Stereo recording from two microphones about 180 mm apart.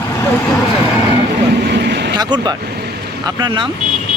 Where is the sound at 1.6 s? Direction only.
70° right (ahead or behind).